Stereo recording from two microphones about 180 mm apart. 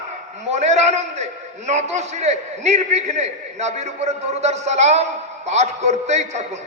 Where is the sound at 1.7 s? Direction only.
40° right (ahead or behind).